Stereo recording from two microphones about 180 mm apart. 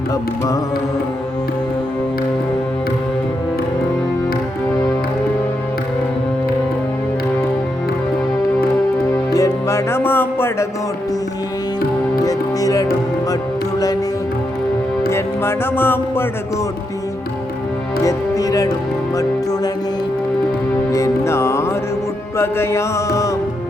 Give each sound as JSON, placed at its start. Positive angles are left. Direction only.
{"t": 0.1, "sound": "music", "side_deg": 20}
{"t": 9.3, "sound": "music", "side_deg": 15}
{"t": 12.2, "sound": "music", "side_deg": 20}
{"t": 15.1, "sound": "music", "side_deg": 15}
{"t": 18.0, "sound": "speech", "side_deg": 20}
{"t": 19.1, "sound": "music", "side_deg": 20}
{"t": 20.9, "sound": "music", "side_deg": 15}